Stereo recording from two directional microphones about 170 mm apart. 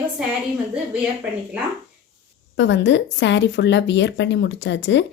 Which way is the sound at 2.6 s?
90° left.